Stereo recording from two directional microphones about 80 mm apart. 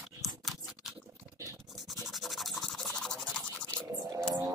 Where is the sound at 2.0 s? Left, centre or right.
Centre.